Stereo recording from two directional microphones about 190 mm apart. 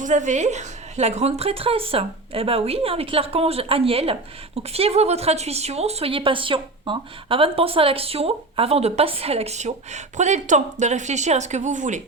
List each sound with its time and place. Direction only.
0.0 s a woman's voice: 40° right (ahead or behind)